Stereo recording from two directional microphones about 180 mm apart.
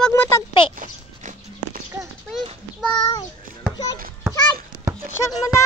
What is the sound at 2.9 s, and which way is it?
Child singing, 20° left (ahead or behind).